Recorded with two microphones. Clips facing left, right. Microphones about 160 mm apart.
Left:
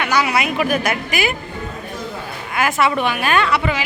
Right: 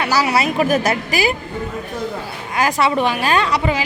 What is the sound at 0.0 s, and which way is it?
A woman's voice, 35° right (ahead or behind).